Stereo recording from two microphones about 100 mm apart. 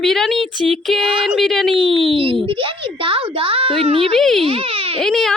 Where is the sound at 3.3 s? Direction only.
65° right (ahead or behind).